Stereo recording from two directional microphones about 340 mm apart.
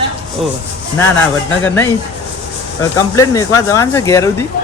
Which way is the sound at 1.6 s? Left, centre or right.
Centre.